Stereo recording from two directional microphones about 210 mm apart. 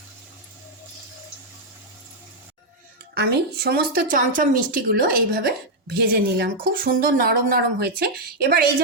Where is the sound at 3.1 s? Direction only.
50° right (ahead or behind).